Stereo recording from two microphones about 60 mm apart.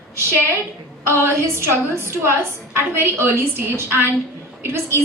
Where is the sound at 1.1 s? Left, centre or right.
Right.